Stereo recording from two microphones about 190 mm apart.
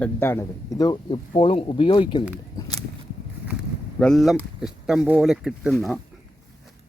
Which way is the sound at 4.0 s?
Centre (ahead or behind).